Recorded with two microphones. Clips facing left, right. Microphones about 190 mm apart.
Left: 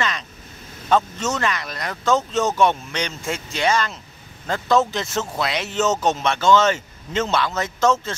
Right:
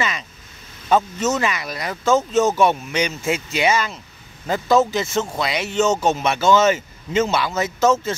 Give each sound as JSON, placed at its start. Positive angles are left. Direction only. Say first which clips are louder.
{"t": 0.8, "sound": "speech", "louder": "right 2 dB", "side_deg": -5}